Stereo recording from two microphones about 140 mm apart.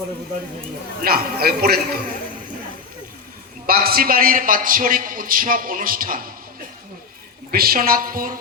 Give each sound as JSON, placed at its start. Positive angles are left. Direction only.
{"t": 1.0, "sound": "a man's voice", "side_deg": -90}
{"t": 3.7, "sound": "a man's voice", "side_deg": -90}
{"t": 7.5, "sound": "a man's voice", "side_deg": -90}